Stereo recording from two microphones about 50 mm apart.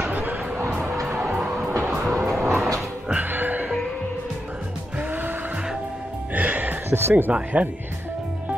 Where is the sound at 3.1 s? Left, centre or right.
Right.